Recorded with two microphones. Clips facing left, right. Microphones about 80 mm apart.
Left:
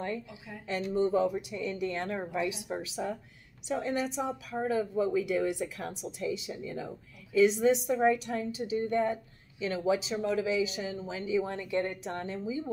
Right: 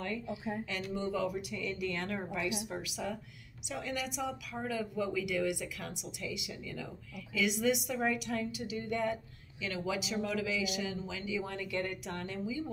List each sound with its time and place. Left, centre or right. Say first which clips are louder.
0.7 s a woman's voice: left 8 dB; left